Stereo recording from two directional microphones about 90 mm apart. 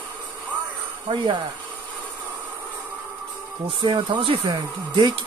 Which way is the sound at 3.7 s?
60° right (ahead or behind).